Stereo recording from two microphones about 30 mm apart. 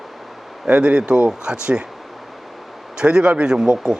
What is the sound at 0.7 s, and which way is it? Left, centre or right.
Speech, right.